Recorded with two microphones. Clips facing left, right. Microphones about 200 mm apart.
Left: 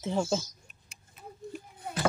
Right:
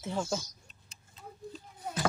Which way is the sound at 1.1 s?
15° left (ahead or behind).